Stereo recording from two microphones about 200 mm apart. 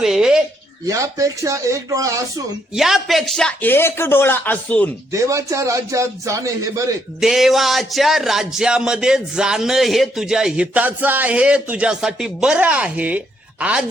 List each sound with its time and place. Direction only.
0.0 s a sound: centre (ahead or behind)
0.9 s a man's voice: 15° right (ahead or behind)
2.7 s speech: centre (ahead or behind)
5.1 s a man's voice: 15° right (ahead or behind)
7.2 s speech: centre (ahead or behind)